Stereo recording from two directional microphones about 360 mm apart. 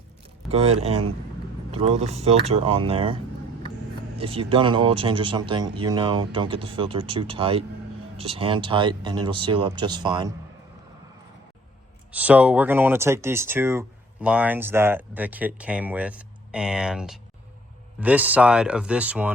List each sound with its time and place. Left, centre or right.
0.5 s speech: centre
4.2 s speech: centre
12.1 s speech: centre